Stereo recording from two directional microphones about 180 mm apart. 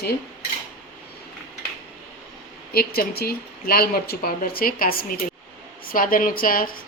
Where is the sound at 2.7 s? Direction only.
60° left (ahead or behind).